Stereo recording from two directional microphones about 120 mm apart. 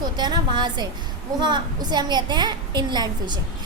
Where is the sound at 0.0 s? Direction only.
35° right (ahead or behind).